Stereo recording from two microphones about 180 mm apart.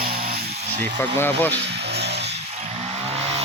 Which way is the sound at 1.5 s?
70° right (ahead or behind).